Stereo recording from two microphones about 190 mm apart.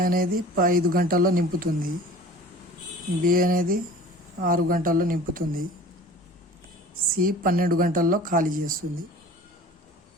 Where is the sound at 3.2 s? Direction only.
50° right (ahead or behind).